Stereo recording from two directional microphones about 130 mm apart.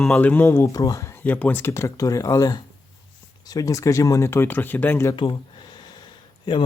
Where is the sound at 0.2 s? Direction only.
15° left (ahead or behind).